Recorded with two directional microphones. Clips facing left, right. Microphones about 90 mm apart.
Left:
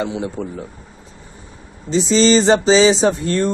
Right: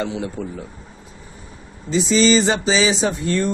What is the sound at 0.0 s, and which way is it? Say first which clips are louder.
Speech: left 2 dB; 20° left (ahead or behind).